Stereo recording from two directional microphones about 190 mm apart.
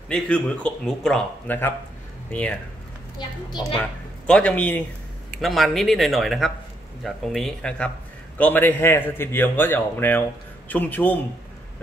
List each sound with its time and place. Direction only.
0.1 s speech: 5° left (ahead or behind)
3.2 s a woman's voice: 20° left (ahead or behind)
4.3 s a man's voice: 5° left (ahead or behind)